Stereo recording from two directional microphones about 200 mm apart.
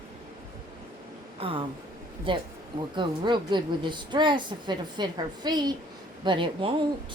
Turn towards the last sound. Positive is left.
turn(degrees=-25)  # may be behind; listen again after turning